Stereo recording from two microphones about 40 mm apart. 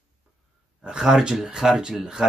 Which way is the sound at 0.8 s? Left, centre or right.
Right.